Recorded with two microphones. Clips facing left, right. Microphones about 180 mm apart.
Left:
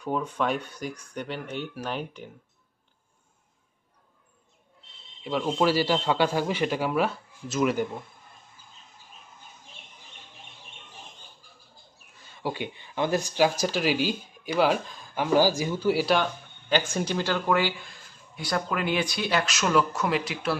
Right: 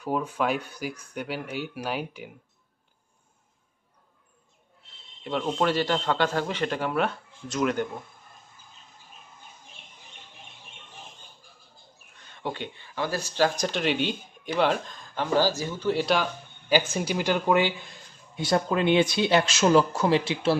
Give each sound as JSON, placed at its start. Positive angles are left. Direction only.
{"t": 0.0, "sound": "speech", "side_deg": -5}
{"t": 5.2, "sound": "speech", "side_deg": 5}
{"t": 12.2, "sound": "speech", "side_deg": 5}
{"t": 16.6, "sound": "speech", "side_deg": -10}